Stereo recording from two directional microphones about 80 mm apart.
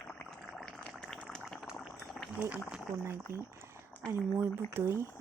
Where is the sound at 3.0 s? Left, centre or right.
Right.